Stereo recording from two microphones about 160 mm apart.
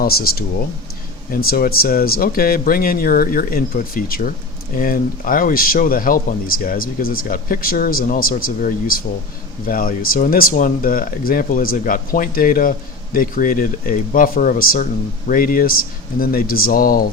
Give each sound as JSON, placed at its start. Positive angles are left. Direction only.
{"t": 0.0, "sound": "speech", "side_deg": 70}